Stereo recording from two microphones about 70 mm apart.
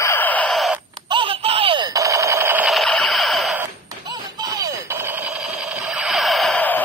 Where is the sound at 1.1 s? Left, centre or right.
Right.